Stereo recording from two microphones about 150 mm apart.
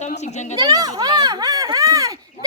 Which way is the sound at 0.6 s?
25° right (ahead or behind).